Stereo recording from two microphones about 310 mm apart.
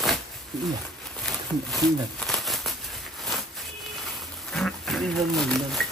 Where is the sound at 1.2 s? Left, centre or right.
Centre.